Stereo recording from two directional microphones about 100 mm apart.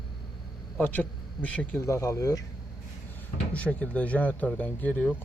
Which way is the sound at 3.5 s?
15° left (ahead or behind).